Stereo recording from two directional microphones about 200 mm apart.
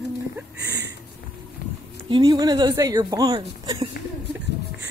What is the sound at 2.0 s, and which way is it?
Speech, 20° right (ahead or behind).